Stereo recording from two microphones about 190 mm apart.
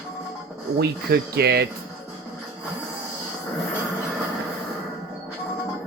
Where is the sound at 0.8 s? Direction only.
55° right (ahead or behind).